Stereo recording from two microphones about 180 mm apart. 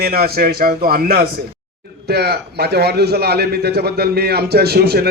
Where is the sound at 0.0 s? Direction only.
60° right (ahead or behind).